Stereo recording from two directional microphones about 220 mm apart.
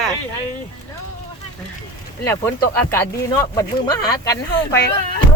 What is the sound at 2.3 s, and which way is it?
Speech, 10° left (ahead or behind).